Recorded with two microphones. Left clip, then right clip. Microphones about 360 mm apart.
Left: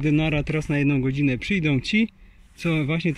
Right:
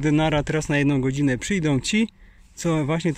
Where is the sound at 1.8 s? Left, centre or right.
Right.